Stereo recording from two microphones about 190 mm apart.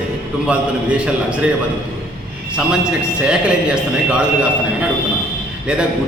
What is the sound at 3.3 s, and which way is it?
Speech, 5° right (ahead or behind).